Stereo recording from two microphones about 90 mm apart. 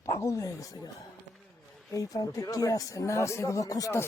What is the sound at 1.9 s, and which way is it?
Speech, 40° left (ahead or behind).